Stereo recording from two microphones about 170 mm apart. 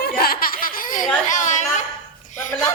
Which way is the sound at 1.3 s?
45° left (ahead or behind).